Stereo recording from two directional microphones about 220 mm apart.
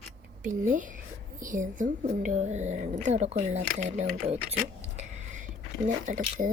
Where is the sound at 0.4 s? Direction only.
35° right (ahead or behind).